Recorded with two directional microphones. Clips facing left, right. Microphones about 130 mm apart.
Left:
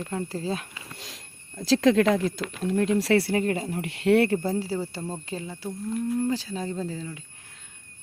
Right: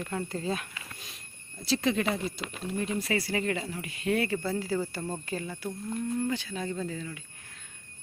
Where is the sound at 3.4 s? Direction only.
40° left (ahead or behind); by 4.3 s 75° left (ahead or behind).